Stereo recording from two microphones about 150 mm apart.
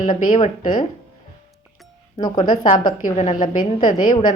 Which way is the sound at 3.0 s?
60° left (ahead or behind).